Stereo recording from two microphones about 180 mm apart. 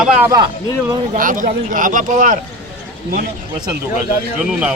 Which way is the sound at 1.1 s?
45° right (ahead or behind).